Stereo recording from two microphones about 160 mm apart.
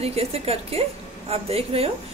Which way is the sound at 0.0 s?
40° right (ahead or behind).